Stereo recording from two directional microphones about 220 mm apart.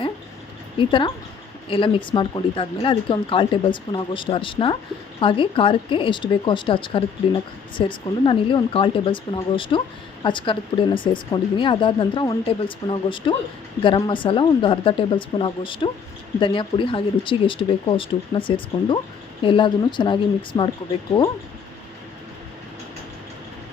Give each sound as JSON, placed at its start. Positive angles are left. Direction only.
{"t": 0.8, "sound": "speech", "side_deg": 20}